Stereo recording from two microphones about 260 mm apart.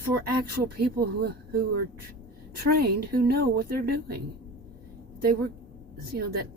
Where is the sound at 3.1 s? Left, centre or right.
Right.